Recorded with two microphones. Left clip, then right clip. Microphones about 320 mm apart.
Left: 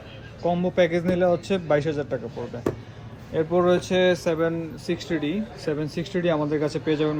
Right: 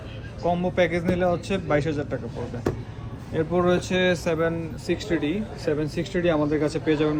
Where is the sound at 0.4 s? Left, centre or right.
Centre.